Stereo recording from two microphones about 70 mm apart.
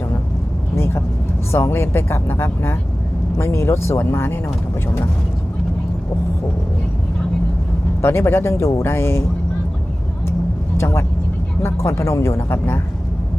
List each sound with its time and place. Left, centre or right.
1.5 s speech: left
8.0 s speech: left
10.8 s speech: left